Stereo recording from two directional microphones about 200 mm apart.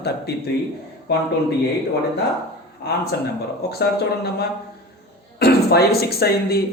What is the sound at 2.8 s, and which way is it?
Speech, 55° left (ahead or behind).